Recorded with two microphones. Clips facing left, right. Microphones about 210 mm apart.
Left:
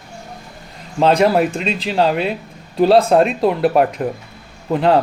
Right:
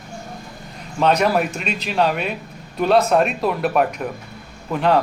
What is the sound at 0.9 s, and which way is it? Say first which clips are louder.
Speech: left 4 dB; 30° left (ahead or behind).